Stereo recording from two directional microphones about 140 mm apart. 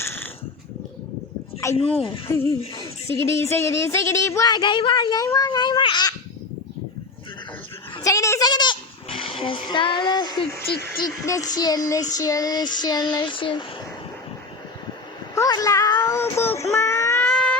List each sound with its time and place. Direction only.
0.0 s a sound: 15° left (ahead or behind)
1.7 s speech: 45° left (ahead or behind)
2.7 s speech: 20° left (ahead or behind)
8.0 s a child's voice: 20° left (ahead or behind)
10.8 s speech: 20° left (ahead or behind)
12.1 s child singing: 25° left (ahead or behind)
15.4 s speech: 25° left (ahead or behind)
17.2 s a sound: 5° left (ahead or behind)